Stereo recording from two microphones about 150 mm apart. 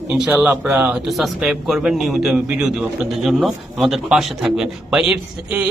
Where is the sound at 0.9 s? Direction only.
Centre (ahead or behind).